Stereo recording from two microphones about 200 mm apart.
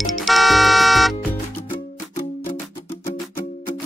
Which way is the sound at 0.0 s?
Centre (ahead or behind).